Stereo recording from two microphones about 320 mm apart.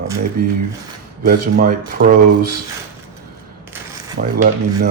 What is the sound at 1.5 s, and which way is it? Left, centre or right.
Speech, right.